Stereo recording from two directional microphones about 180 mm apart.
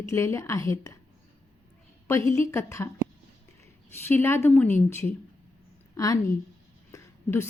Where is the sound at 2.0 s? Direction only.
15° left (ahead or behind).